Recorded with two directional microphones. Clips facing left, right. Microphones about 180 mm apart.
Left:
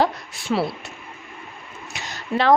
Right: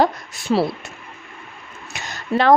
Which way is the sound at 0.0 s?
45° right (ahead or behind).